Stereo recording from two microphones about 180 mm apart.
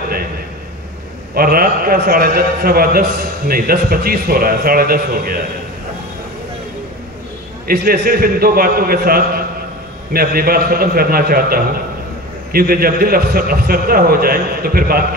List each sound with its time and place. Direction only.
1.3 s a man's voice: 55° right (ahead or behind)
7.6 s a man's voice: 55° right (ahead or behind)